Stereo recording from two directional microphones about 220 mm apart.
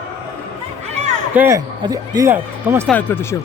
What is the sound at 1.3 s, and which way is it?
Speech, 15° right (ahead or behind).